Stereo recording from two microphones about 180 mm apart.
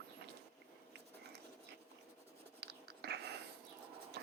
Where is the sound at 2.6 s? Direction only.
65° right (ahead or behind).